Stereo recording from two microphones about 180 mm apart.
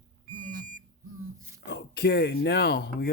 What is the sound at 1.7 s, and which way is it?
Speech, 65° left (ahead or behind).